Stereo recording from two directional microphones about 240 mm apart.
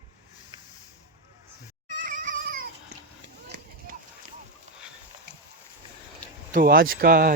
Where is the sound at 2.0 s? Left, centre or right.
Right.